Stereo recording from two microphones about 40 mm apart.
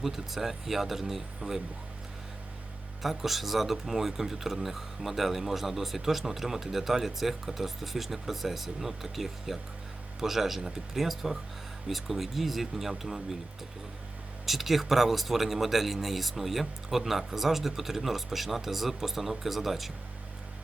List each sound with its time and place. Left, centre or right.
0.0 s speech: centre
3.0 s a man's voice: centre
14.4 s speech: centre